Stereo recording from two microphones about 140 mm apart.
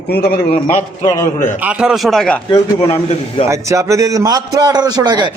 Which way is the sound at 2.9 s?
45° left (ahead or behind).